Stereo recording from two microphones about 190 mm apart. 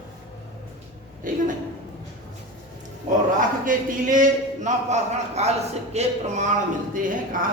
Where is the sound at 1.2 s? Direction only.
45° right (ahead or behind).